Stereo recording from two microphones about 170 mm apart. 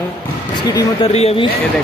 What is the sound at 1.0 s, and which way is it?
Speech, 35° left (ahead or behind).